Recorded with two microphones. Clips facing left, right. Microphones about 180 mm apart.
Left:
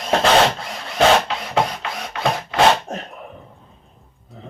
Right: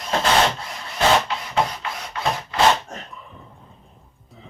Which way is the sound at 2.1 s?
75° left (ahead or behind).